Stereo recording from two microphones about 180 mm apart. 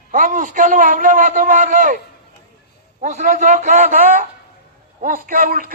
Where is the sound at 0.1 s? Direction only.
50° right (ahead or behind).